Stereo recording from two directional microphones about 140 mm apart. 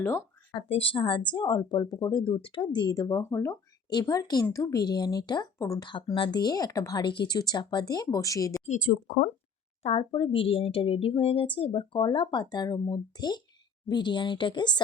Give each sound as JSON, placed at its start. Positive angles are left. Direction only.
{"t": 0.5, "sound": "speech", "side_deg": 40}
{"t": 6.1, "sound": "speech", "side_deg": 35}
{"t": 8.6, "sound": "speech", "side_deg": 60}
{"t": 9.8, "sound": "speech", "side_deg": 45}